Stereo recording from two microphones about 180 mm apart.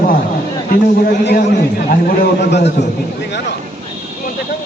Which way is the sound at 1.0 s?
65° left (ahead or behind).